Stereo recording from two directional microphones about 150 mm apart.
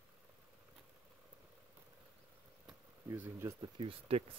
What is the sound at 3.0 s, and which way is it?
Speech, 15° right (ahead or behind).